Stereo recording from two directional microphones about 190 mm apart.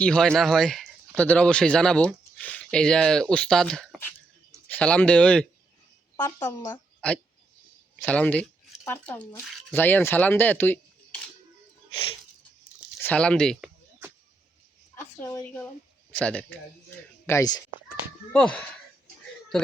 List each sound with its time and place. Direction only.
0.0 s a woman's voice: 5° left (ahead or behind)
13.0 s speech: 10° left (ahead or behind)
14.9 s speech: 15° left (ahead or behind)
17.2 s speech: 15° left (ahead or behind)
18.3 s speech: 5° left (ahead or behind)